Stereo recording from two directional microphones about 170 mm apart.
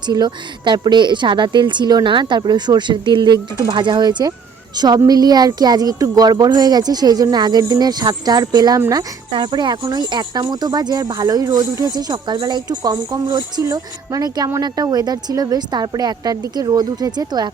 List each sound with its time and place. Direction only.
0.0 s speech: 25° right (ahead or behind)